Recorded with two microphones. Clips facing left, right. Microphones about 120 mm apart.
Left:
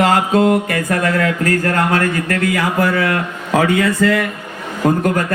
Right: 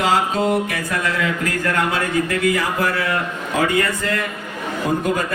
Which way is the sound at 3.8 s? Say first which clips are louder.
Left 8 dB; 90° left.